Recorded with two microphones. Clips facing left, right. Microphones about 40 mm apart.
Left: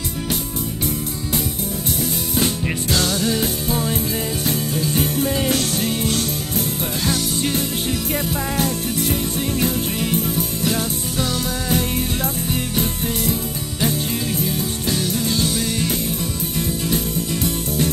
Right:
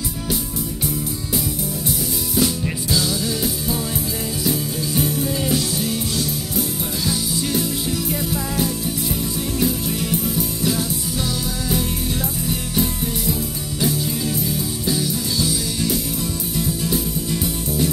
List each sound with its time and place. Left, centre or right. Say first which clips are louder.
2.0 s music: right 1 dB; left
2.9 s music: left 2 dB; left
3.3 s music: left 2 dB; left
5.5 s music: left 1 dB; left
8.5 s music: left 1 dB; left
12.4 s music: even; left
14.9 s music: left 1 dB; left